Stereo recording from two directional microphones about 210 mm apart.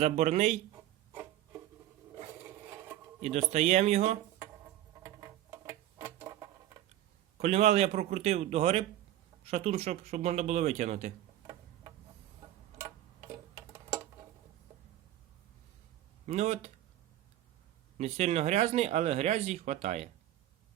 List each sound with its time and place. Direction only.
0.0 s speech: 30° right (ahead or behind)
1.1 s rub: 10° right (ahead or behind)
2.4 s a sound: 15° right (ahead or behind)
3.2 s speech: 30° right (ahead or behind)
4.4 s a sound: 15° right (ahead or behind)
7.3 s speech: 30° right (ahead or behind)
11.4 s tick-tock: 20° right (ahead or behind)
16.2 s speech: 30° right (ahead or behind)
17.9 s speech: 30° right (ahead or behind)